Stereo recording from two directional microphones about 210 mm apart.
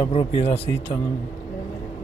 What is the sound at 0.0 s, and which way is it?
Speech, 30° left (ahead or behind).